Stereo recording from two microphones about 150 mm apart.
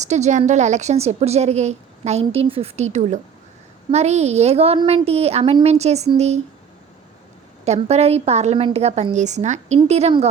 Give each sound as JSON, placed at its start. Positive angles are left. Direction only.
{"t": 0.0, "sound": "a woman's voice", "side_deg": -50}
{"t": 7.6, "sound": "a woman's voice", "side_deg": -45}